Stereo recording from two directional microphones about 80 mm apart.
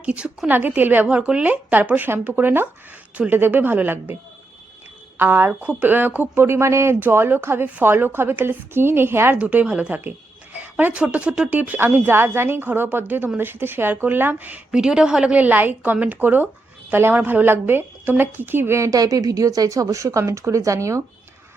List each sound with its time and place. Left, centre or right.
0.0 s a woman's voice: centre
5.5 s speech: centre
9.4 s a woman's voice: centre
14.7 s a woman's voice: centre; by 21.0 s right